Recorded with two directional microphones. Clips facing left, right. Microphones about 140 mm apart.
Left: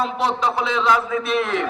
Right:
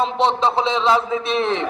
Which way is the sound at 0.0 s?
25° right (ahead or behind).